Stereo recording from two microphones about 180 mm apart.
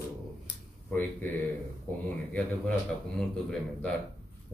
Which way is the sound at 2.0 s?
10° left (ahead or behind).